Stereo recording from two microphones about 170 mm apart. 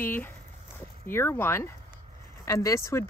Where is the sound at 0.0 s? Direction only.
10° left (ahead or behind).